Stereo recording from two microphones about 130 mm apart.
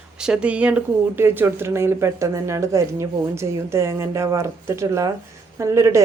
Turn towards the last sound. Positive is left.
turn(degrees=-25)  # may be behind; listen again after turning